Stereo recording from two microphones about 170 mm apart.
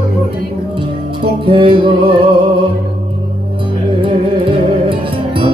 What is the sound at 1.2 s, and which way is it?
Music, 30° right (ahead or behind).